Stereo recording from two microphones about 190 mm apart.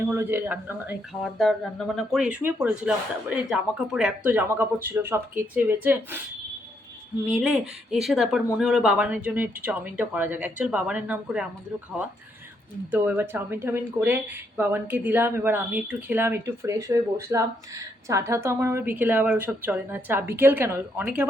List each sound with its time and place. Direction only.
0.0 s speech: 10° right (ahead or behind)
1.2 s speech: centre (ahead or behind)
8.0 s speech: centre (ahead or behind)
12.9 s speech: 10° right (ahead or behind)